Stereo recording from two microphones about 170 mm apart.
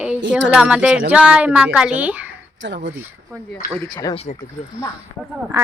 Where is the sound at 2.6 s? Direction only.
90° right.